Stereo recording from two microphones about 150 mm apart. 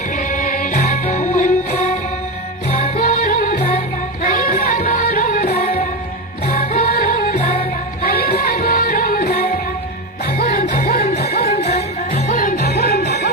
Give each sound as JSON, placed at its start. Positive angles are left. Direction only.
{"t": 0.2, "sound": "music", "side_deg": 60}
{"t": 2.6, "sound": "music", "side_deg": 40}
{"t": 3.0, "sound": "music", "side_deg": 65}
{"t": 6.5, "sound": "music", "side_deg": 65}
{"t": 7.3, "sound": "music", "side_deg": 45}
{"t": 8.0, "sound": "music", "side_deg": 90}
{"t": 11.2, "sound": "music", "side_deg": 90}
{"t": 11.4, "sound": "music", "side_deg": 45}
{"t": 12.4, "sound": "music", "side_deg": 80}